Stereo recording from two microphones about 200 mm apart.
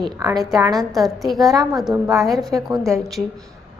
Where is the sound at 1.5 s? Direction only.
20° right (ahead or behind).